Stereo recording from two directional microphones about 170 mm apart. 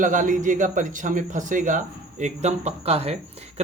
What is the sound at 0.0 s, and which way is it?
Speech, 50° right (ahead or behind).